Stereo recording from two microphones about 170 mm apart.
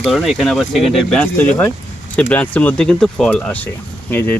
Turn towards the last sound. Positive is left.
turn(degrees=10)  # may be behind; listen again after turning